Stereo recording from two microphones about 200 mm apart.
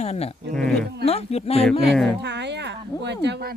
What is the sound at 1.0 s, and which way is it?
Speech, 30° left (ahead or behind).